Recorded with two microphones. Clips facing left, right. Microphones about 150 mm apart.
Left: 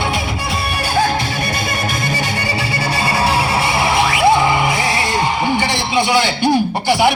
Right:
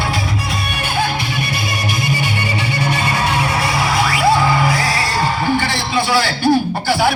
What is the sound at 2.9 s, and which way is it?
Music, 30° left (ahead or behind).